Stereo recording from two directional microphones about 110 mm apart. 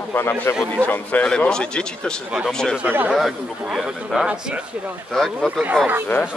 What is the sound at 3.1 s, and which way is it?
Speech, centre (ahead or behind).